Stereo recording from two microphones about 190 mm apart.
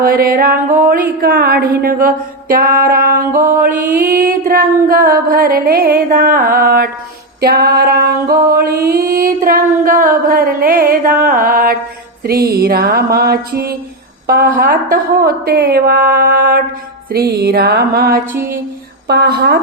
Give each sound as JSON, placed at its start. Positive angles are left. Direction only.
{"t": 0.0, "sound": "speech", "side_deg": -50}
{"t": 7.4, "sound": "music", "side_deg": -55}
{"t": 8.5, "sound": "speech", "side_deg": -55}
{"t": 12.2, "sound": "music", "side_deg": -55}
{"t": 14.3, "sound": "speech", "side_deg": -50}
{"t": 17.1, "sound": "music", "side_deg": -55}